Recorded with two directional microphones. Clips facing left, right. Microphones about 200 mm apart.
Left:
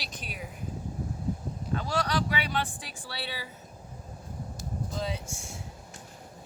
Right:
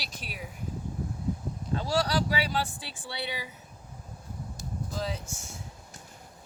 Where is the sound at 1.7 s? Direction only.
30° right (ahead or behind).